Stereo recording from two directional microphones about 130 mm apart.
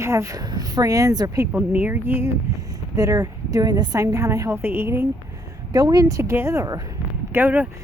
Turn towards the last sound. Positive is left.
turn(degrees=-15)  # may be behind; listen again after turning